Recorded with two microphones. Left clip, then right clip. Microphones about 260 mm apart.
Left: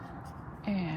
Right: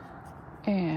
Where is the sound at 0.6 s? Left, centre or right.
Right.